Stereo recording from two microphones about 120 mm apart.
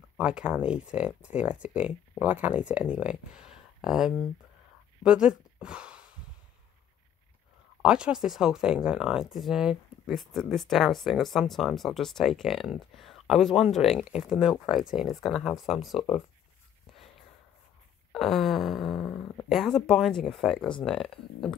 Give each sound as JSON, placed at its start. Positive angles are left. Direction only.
{"t": 0.2, "sound": "a woman's voice", "side_deg": -5}
{"t": 7.8, "sound": "speech", "side_deg": -5}
{"t": 18.1, "sound": "a sound", "side_deg": 0}
{"t": 19.5, "sound": "speech", "side_deg": 0}